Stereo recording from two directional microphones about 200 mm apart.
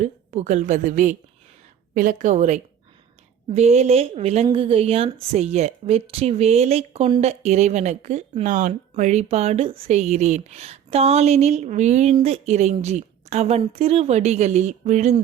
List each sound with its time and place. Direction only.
0.0 s a woman's voice: 35° right (ahead or behind)